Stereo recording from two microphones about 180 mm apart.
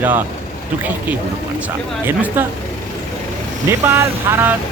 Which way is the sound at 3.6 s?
15° right (ahead or behind).